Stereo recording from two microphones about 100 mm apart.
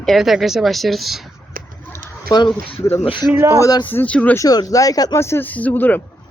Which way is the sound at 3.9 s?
15° left (ahead or behind).